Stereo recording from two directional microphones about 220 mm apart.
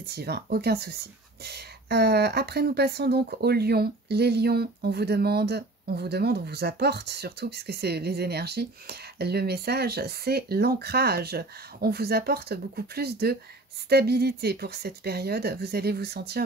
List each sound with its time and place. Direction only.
0.0 s speech: 45° right (ahead or behind)